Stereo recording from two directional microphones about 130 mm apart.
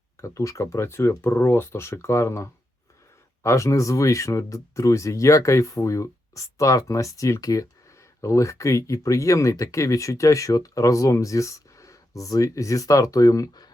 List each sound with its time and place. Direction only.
0.2 s speech: 25° left (ahead or behind)